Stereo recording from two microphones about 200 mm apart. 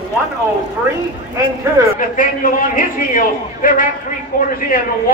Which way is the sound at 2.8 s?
45° left (ahead or behind).